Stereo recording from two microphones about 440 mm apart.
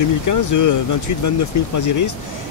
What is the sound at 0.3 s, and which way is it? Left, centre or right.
Speech, left.